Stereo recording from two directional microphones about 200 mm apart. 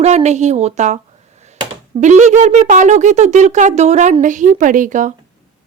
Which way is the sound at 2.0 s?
35° right (ahead or behind).